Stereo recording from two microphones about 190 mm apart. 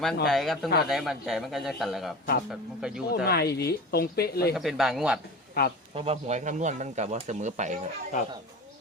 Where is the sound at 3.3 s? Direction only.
55° left (ahead or behind).